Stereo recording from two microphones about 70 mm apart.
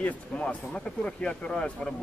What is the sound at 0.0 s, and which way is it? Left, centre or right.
Speech, centre.